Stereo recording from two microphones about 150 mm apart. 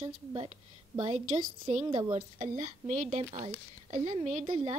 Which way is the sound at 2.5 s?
55° right (ahead or behind).